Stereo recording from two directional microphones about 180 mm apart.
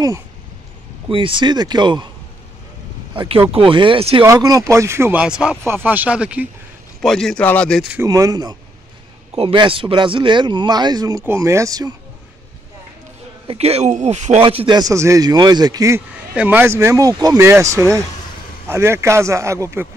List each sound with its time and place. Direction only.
1.0 s speech: 30° right (ahead or behind)
3.2 s speech: 30° right (ahead or behind)
4.2 s speech: 20° right (ahead or behind); by 7.8 s 5° left (ahead or behind)
7.9 s speech: 15° right (ahead or behind)
13.5 s speech: 35° right (ahead or behind); by 19.9 s 15° right (ahead or behind)